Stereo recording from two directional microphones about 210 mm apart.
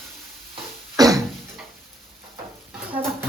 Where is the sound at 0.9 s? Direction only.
15° right (ahead or behind).